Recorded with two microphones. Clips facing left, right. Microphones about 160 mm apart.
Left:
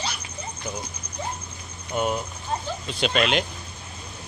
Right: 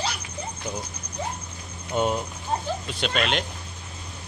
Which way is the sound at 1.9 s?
25° right (ahead or behind).